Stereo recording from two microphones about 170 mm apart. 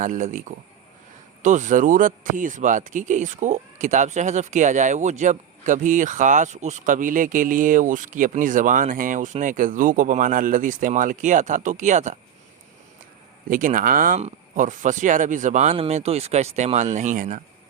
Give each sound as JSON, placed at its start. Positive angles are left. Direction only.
{"t": 0.0, "sound": "speech", "side_deg": -45}
{"t": 13.5, "sound": "speech", "side_deg": -50}